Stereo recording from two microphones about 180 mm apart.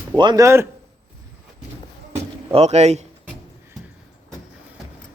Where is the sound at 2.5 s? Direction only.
35° right (ahead or behind).